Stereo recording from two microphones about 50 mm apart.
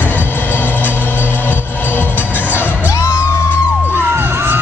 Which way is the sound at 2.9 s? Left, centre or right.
Left.